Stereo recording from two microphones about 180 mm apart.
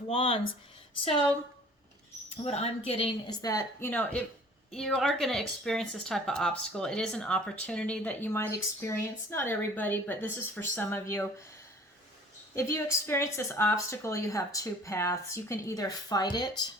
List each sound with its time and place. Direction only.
0.1 s speech: 30° left (ahead or behind)
2.4 s a woman's voice: 35° left (ahead or behind)
3.5 s speech: 15° left (ahead or behind)
12.5 s speech: 15° left (ahead or behind)